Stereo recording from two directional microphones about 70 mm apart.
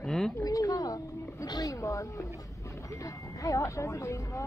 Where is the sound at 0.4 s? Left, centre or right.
Left.